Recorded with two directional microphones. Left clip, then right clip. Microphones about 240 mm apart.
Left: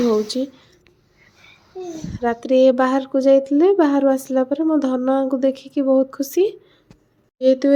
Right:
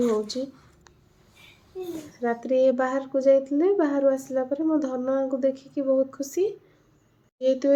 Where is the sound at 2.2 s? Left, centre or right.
Left.